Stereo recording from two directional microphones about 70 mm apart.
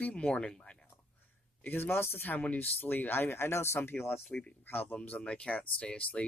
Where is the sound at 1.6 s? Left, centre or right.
Left.